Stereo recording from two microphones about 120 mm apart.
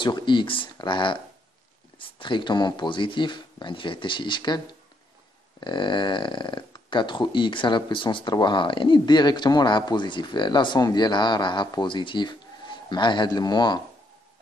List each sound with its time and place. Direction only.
0.0 s speech: 40° left (ahead or behind)
5.6 s speech: 40° left (ahead or behind)